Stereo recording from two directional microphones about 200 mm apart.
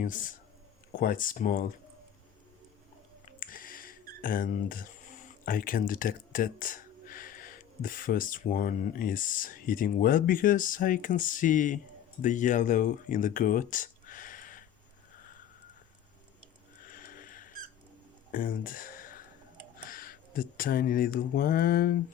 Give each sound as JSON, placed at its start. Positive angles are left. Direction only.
{"t": 0.0, "sound": "speech", "side_deg": 40}
{"t": 3.2, "sound": "speech", "side_deg": 45}
{"t": 16.8, "sound": "a sound", "side_deg": 45}
{"t": 19.9, "sound": "speech", "side_deg": 45}